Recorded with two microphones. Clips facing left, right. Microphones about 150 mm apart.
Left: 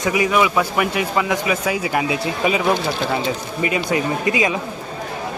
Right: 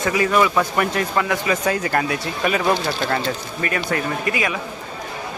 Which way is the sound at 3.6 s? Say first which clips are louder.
Left 3 dB; 15° left (ahead or behind).